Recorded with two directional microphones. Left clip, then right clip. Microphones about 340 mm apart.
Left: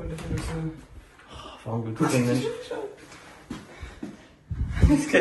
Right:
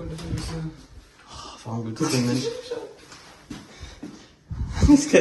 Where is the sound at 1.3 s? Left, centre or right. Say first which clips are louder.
Left 1 dB; centre.